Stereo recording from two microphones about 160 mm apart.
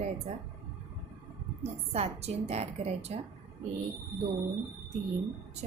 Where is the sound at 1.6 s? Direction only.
40° right (ahead or behind).